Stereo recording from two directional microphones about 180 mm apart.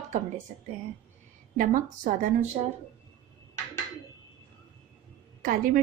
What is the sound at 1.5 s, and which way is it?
Speech, 50° right (ahead or behind).